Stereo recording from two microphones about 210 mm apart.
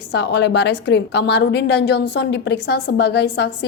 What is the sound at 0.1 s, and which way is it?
A woman's voice, 55° left (ahead or behind).